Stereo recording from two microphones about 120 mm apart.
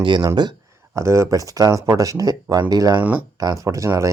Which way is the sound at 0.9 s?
25° right (ahead or behind).